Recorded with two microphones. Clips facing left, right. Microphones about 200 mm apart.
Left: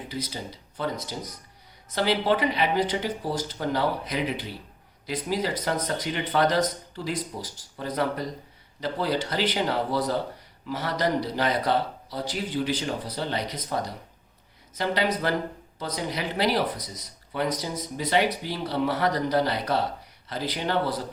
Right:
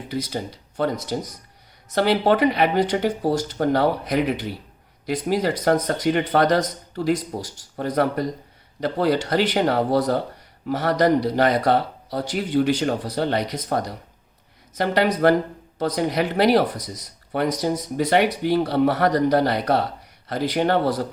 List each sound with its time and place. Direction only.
0.1 s speech: 60° right (ahead or behind)
2.0 s speech: 55° right (ahead or behind)